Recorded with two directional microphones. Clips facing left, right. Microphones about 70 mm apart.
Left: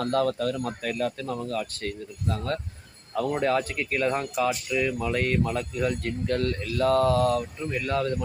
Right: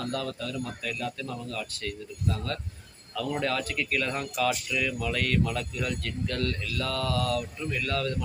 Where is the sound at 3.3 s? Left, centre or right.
Left.